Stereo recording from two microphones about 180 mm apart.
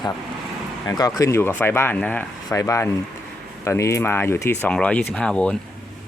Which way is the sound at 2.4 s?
20° left (ahead or behind).